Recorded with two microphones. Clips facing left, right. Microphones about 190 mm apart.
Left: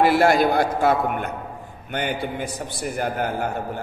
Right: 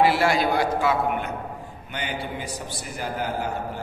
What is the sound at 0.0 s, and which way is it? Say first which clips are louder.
A man's voice: left 3 dB; 50° left (ahead or behind).